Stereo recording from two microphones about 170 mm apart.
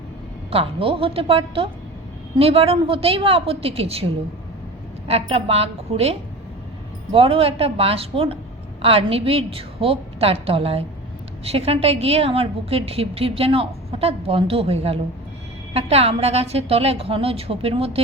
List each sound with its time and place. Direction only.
0.5 s a woman's voice: 35° right (ahead or behind)
5.0 s a woman's voice: 35° right (ahead or behind)